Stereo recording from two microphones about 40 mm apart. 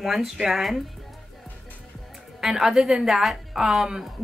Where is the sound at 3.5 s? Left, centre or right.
Centre.